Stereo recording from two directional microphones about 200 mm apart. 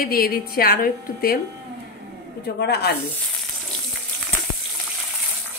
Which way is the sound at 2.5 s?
55° left (ahead or behind).